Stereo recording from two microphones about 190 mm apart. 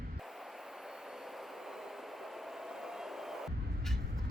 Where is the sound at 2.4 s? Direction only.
Centre (ahead or behind).